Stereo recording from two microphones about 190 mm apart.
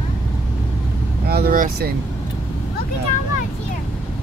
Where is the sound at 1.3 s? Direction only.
50° right (ahead or behind).